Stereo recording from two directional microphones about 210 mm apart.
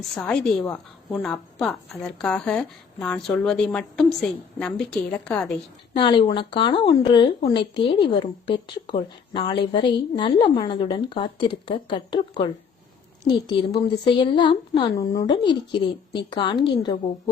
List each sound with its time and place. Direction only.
0.2 s a woman's voice: 5° left (ahead or behind)
5.9 s a woman's voice: 25° left (ahead or behind)